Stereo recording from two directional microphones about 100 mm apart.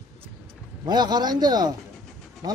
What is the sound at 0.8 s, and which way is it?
Speech, 45° right (ahead or behind).